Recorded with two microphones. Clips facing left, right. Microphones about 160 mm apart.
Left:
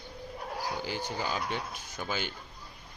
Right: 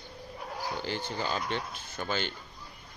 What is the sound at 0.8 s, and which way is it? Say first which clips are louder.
Speech: right 1 dB; 10° left (ahead or behind).